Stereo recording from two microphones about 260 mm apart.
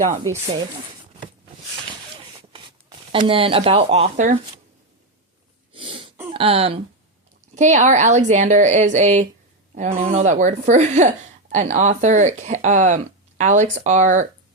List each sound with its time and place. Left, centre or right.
0.4 s speech: right
2.5 s speech: centre
5.7 s throat clearing: centre
6.3 s speech: right